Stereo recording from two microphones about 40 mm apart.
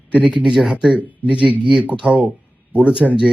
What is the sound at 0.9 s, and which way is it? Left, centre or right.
Speech, right.